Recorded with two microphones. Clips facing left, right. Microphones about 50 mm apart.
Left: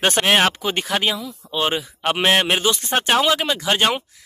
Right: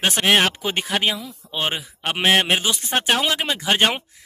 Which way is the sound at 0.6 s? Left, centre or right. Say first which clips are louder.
Left 1 dB; centre.